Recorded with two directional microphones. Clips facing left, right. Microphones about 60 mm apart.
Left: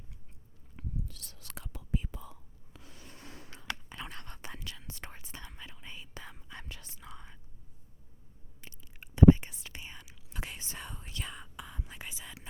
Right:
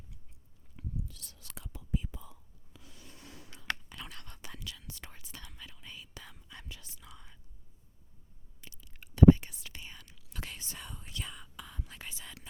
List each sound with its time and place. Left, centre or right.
0.8 s whispering: left
3.8 s whispering: left
8.6 s a sound: left
9.1 s whispering: left
9.8 s whispering: centre; by 11.4 s left
11.5 s whispering: centre